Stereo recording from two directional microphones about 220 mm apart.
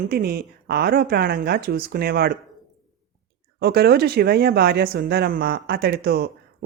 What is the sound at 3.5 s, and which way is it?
Speech, 45° right (ahead or behind).